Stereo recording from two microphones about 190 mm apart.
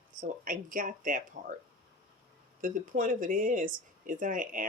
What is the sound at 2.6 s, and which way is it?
Speech, 45° right (ahead or behind).